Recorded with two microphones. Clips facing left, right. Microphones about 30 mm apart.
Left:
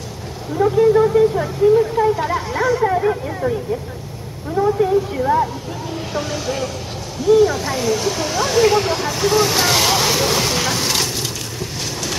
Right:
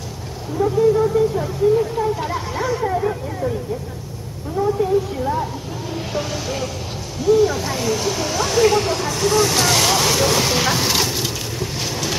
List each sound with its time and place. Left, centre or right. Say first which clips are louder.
0.6 s speech: left 3 dB; left
1.8 s speech: left 4 dB; centre
2.8 s speech: left 4 dB; left
4.6 s speech: left 2 dB; left
6.1 s music: left 2 dB; centre
7.2 s speech: left 2 dB; centre